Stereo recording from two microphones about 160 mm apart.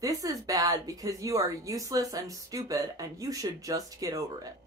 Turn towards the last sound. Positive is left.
turn(degrees=-20)  # may be behind; listen again after turning